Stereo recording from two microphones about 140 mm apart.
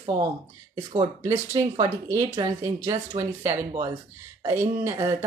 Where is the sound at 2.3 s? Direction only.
25° right (ahead or behind).